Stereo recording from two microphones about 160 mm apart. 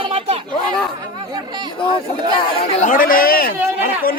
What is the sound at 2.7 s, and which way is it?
Speech, 55° left (ahead or behind).